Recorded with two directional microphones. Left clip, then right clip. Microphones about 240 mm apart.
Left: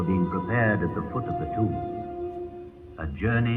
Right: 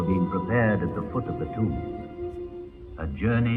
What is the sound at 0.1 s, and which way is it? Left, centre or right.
Speech, right.